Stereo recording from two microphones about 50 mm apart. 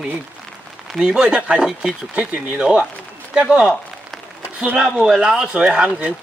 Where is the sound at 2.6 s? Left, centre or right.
Centre.